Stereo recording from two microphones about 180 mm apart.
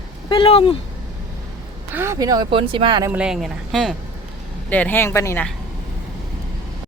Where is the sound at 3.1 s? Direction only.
5° right (ahead or behind); by 5.4 s 15° left (ahead or behind).